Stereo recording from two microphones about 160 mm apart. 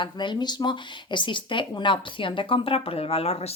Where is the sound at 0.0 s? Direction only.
30° left (ahead or behind).